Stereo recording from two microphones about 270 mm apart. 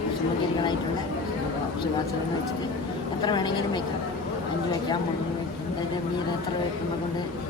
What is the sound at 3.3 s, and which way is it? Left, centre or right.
Speech, centre.